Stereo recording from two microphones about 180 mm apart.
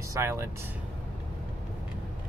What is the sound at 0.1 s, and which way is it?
Speech, 15° right (ahead or behind).